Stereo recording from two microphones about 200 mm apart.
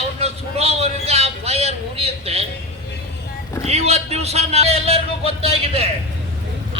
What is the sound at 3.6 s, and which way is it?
A man's voice, 30° right (ahead or behind).